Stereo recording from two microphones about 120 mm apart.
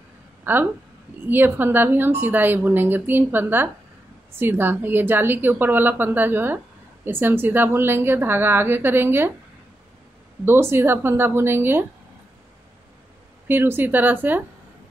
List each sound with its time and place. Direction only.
0.4 s a sound: 15° right (ahead or behind)
1.2 s a woman's voice: 15° right (ahead or behind)
10.4 s a woman's voice: 20° right (ahead or behind)
13.5 s a woman's voice: 20° right (ahead or behind)